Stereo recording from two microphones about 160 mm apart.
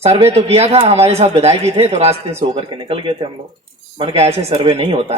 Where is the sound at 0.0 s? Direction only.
40° right (ahead or behind).